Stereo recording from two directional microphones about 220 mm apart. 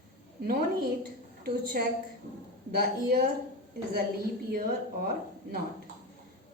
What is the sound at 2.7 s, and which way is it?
Speech, 40° right (ahead or behind).